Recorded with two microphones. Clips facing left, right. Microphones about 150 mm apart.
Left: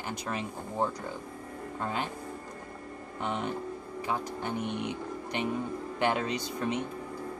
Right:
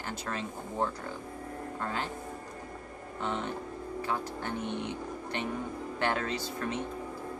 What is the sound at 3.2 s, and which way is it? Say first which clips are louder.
Speech: left 2 dB; 15° left (ahead or behind).